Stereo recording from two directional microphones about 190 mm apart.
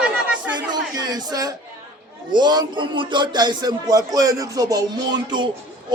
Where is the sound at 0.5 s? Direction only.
20° right (ahead or behind).